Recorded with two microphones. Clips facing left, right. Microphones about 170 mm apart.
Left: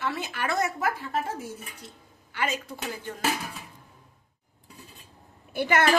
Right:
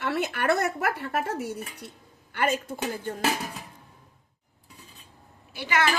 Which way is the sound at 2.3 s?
55° right (ahead or behind).